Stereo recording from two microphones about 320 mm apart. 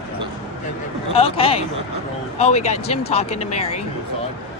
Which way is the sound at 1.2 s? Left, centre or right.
Centre.